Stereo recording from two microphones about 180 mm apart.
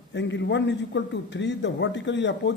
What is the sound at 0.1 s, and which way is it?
A man's voice, 85° left.